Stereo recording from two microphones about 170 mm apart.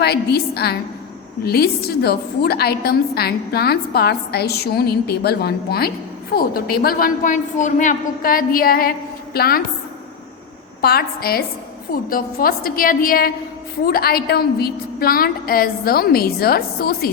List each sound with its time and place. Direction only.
0.0 s a woman's voice: 70° left (ahead or behind)
10.8 s a woman's voice: 65° left (ahead or behind)